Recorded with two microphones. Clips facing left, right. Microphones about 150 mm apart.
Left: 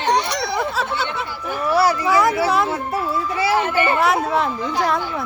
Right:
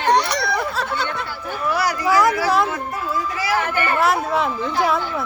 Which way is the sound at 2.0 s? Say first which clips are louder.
Even; centre (ahead or behind).